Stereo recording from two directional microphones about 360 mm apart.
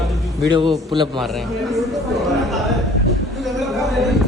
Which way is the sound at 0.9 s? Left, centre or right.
Centre.